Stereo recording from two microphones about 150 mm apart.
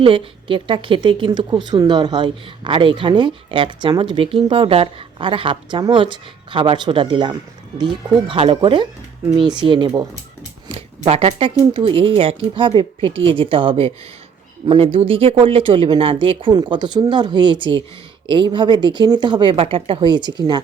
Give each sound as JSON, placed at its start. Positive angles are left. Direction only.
{"t": 0.0, "sound": "a woman's voice", "side_deg": -35}
{"t": 10.7, "sound": "a woman's voice", "side_deg": -40}